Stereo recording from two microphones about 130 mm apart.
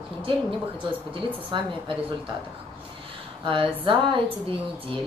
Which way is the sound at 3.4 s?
40° right (ahead or behind).